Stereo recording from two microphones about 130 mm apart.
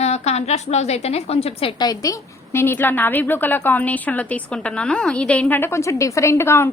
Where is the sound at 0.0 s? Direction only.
55° left (ahead or behind).